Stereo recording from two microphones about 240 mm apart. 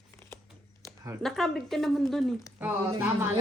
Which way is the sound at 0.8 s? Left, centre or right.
Centre.